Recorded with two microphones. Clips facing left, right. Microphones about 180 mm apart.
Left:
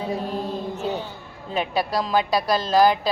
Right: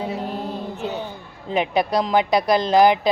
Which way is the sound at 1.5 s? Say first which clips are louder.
Right 4 dB; 20° right (ahead or behind).